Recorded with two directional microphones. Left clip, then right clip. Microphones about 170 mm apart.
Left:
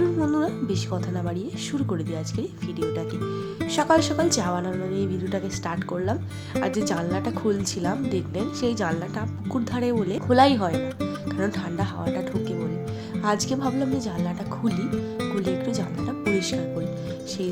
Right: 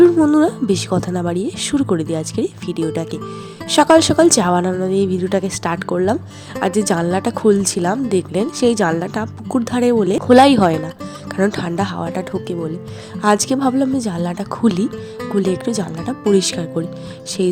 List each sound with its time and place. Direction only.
0.0 s speech: 40° right (ahead or behind)